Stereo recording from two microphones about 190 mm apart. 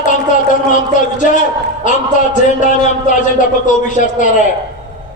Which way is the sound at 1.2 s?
45° left (ahead or behind).